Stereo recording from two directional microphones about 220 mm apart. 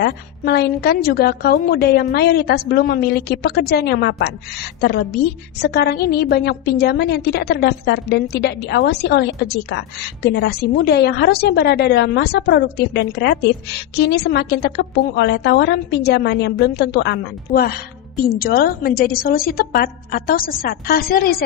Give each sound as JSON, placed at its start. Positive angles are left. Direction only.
{"t": 0.0, "sound": "a woman's voice", "side_deg": 45}